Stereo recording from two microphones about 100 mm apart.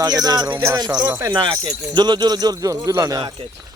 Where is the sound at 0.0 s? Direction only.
40° right (ahead or behind).